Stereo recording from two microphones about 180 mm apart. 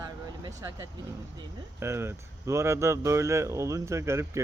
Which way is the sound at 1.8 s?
15° right (ahead or behind).